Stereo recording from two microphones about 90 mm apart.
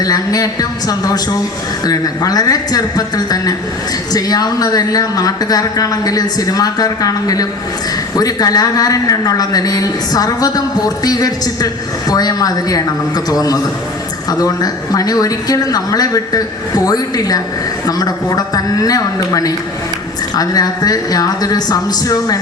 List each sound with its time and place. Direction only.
0.0 s a woman's voice: 45° left (ahead or behind)